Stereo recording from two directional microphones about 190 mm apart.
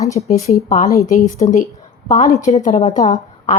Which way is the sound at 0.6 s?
40° left (ahead or behind).